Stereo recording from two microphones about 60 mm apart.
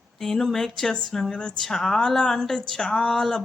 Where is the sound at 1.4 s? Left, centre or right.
Centre.